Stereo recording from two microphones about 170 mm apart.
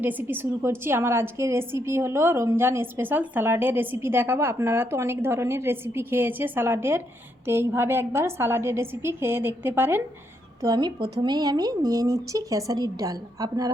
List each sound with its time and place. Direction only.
0.0 s a woman's voice: 10° right (ahead or behind)